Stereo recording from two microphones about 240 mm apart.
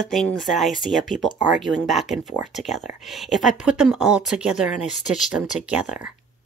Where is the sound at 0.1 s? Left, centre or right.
Centre.